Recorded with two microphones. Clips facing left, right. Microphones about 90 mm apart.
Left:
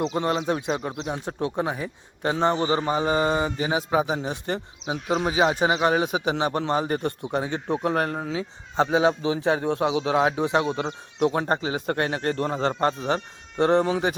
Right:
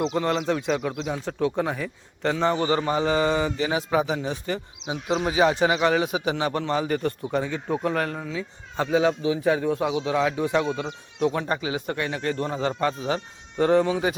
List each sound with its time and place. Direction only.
0.1 s a man's voice: 30° left (ahead or behind)
2.3 s a man's voice: 30° left (ahead or behind)
7.3 s speech: 60° left (ahead or behind)
7.9 s a man's voice: 40° left (ahead or behind)
8.7 s a man's voice: 25° left (ahead or behind)
10.6 s a man's voice: 35° left (ahead or behind)